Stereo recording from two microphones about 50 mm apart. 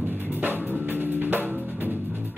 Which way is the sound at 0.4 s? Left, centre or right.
Right.